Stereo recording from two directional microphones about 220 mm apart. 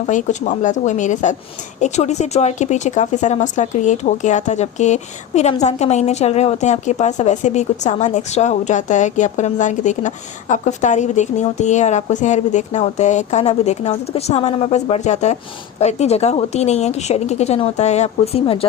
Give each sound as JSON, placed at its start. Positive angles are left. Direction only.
{"t": 0.1, "sound": "speech", "side_deg": 35}